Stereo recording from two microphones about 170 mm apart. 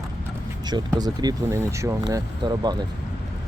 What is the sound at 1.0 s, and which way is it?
Speech, 25° right (ahead or behind).